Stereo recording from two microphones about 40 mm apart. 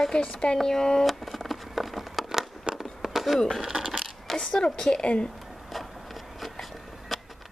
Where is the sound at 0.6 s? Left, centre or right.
Centre.